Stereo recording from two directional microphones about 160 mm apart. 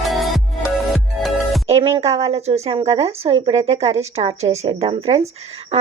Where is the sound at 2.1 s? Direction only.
40° right (ahead or behind).